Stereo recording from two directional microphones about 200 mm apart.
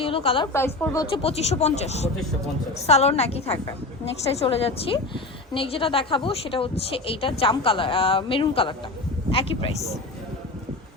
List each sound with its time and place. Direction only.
0.0 s a sound: 30° left (ahead or behind)
0.5 s a woman's voice: 10° left (ahead or behind)
1.1 s a woman's voice: 30° left (ahead or behind)